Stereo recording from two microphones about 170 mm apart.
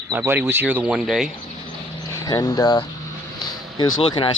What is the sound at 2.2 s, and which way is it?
A man's voice, 20° left (ahead or behind).